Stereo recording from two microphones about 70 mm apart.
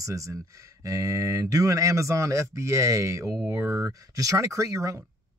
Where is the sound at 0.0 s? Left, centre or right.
Right.